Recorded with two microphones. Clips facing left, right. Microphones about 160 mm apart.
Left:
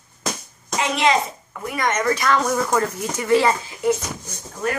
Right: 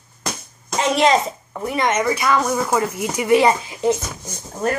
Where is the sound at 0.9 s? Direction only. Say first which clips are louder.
Right 4 dB; 40° right (ahead or behind); by 2.1 s 20° right (ahead or behind).